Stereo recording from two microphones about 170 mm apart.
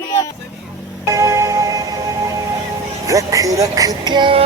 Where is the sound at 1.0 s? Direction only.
15° right (ahead or behind).